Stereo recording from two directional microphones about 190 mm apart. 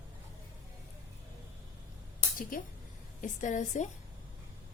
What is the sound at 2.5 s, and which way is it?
A woman's voice, 45° left (ahead or behind).